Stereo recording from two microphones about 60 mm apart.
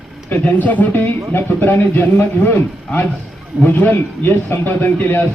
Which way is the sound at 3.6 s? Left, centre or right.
Left.